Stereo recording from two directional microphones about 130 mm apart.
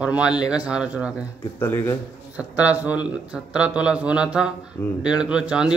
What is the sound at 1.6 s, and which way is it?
Speech, 20° left (ahead or behind).